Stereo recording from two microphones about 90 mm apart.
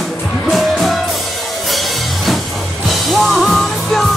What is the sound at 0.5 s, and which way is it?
Music, centre (ahead or behind).